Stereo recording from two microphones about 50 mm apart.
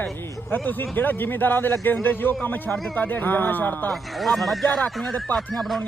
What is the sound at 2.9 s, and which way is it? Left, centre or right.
Speech, left.